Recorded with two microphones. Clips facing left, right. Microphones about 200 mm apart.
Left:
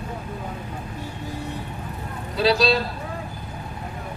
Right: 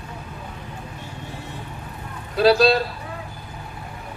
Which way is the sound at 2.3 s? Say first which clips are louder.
Right 4 dB; 55° right (ahead or behind).